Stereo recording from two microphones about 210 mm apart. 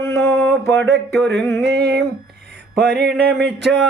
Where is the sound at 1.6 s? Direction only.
50° right (ahead or behind).